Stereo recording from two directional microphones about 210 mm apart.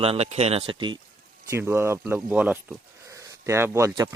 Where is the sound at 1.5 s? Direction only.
10° right (ahead or behind).